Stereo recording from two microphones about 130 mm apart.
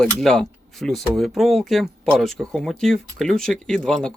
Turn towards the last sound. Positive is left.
turn(degrees=5)  # may be behind; listen again after turning